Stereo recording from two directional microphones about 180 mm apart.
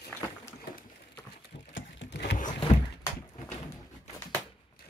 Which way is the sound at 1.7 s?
80° left.